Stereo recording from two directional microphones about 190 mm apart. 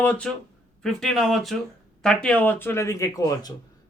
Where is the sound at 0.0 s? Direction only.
5° left (ahead or behind).